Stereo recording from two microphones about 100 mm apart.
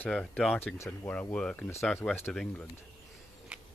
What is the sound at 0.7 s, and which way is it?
Speech, 30° left (ahead or behind).